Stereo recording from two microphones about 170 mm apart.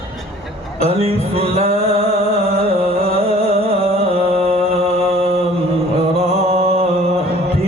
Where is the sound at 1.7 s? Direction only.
35° right (ahead or behind).